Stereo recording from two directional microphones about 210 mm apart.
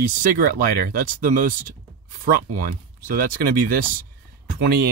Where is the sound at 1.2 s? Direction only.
40° right (ahead or behind).